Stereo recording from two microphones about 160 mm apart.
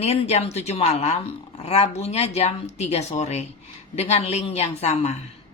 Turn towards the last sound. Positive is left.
turn(degrees=40)  # may be behind; listen again after turning